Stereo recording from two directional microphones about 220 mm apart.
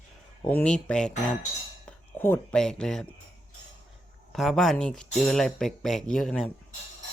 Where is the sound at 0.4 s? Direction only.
5° left (ahead or behind).